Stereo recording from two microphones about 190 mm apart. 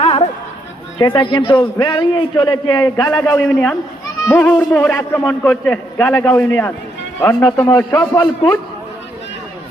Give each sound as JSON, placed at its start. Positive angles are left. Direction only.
{"t": 0.0, "sound": "a sound", "side_deg": 35}
{"t": 0.9, "sound": "a man's voice", "side_deg": 25}
{"t": 3.4, "sound": "a man's voice", "side_deg": 5}
{"t": 7.9, "sound": "a man's voice", "side_deg": 15}